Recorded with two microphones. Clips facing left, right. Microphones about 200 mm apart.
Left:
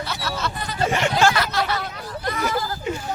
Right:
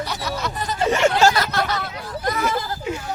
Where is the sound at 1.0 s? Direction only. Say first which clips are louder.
Right 3 dB; 40° right (ahead or behind).